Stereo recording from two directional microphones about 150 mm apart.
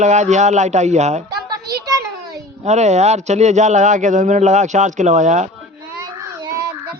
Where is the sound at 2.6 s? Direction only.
50° right (ahead or behind).